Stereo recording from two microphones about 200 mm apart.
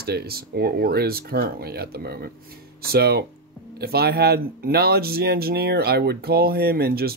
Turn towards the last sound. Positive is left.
turn(degrees=-50)  # may be behind; listen again after turning